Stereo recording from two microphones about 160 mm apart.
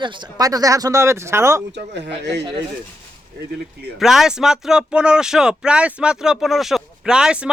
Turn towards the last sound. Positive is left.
turn(degrees=-5)  # may be behind; listen again after turning